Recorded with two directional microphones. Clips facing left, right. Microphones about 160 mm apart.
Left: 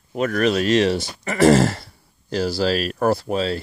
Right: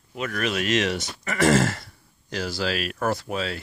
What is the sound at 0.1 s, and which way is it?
Speech, 40° left (ahead or behind).